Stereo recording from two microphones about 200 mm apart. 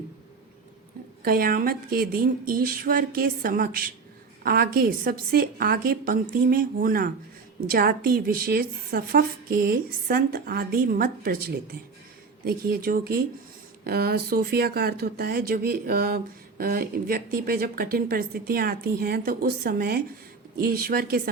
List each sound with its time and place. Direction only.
1.2 s speech: 45° right (ahead or behind)